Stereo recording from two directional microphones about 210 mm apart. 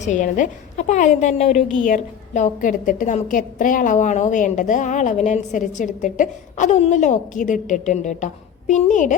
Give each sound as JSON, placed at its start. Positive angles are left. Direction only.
{"t": 0.0, "sound": "a woman's voice", "side_deg": 35}